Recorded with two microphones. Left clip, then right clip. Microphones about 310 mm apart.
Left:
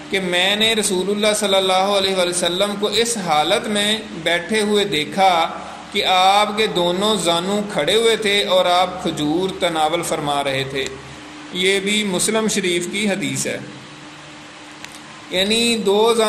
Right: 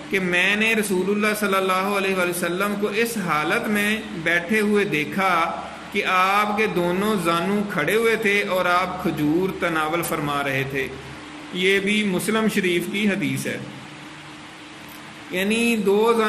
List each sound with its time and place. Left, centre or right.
0.1 s a man's voice: centre
12.6 s a man's voice: left
13.0 s a man's voice: centre
15.3 s a man's voice: centre